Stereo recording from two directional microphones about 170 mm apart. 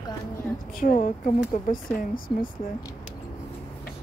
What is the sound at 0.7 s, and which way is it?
Speech, 50° left (ahead or behind).